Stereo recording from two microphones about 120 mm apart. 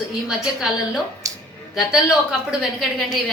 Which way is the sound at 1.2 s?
30° right (ahead or behind).